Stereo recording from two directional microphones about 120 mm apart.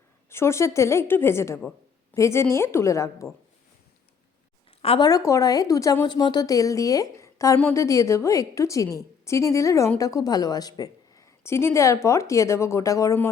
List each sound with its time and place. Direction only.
0.3 s a woman's voice: 20° left (ahead or behind)
4.9 s a woman's voice: 30° left (ahead or behind)